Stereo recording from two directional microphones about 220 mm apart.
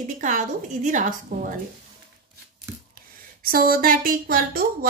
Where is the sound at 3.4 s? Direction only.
40° right (ahead or behind).